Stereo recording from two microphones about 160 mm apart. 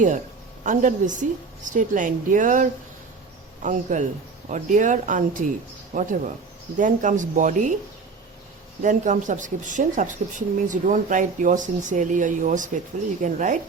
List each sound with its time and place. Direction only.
0.6 s speech: 50° right (ahead or behind)
8.8 s speech: 50° right (ahead or behind)